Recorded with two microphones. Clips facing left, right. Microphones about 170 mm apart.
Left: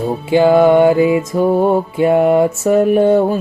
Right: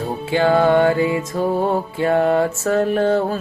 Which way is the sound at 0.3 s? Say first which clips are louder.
Left 6 dB; 15° left (ahead or behind).